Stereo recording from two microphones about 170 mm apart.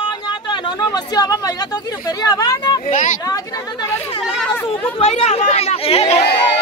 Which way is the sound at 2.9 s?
50° left (ahead or behind).